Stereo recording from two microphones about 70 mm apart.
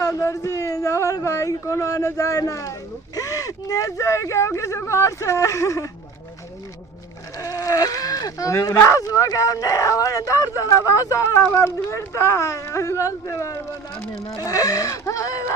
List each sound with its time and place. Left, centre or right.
0.0 s a sound: left
3.2 s speech: left
7.3 s speech: left